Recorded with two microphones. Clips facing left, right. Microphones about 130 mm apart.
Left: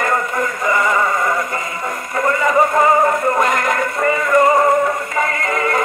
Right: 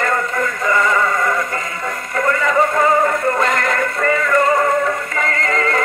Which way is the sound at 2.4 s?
20° left (ahead or behind).